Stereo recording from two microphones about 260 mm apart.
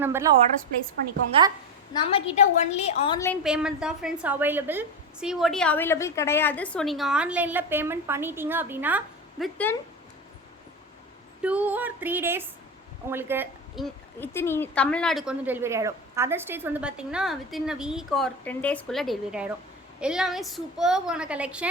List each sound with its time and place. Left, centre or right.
0.0 s speech: centre
1.9 s a woman's voice: left
3.4 s a woman's voice: centre
11.4 s a woman's voice: centre